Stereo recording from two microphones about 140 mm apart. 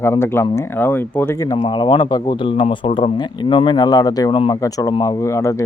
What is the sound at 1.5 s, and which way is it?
Speech, 35° left (ahead or behind).